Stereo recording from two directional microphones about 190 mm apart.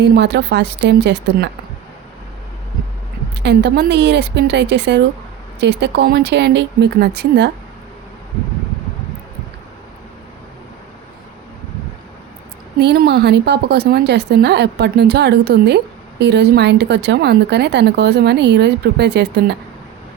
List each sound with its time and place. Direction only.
0.0 s speech: 65° right (ahead or behind)
3.4 s speech: 65° right (ahead or behind)
12.8 s speech: 60° right (ahead or behind)